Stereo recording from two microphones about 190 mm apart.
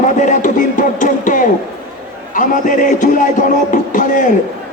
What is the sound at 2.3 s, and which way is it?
Music, 45° left (ahead or behind).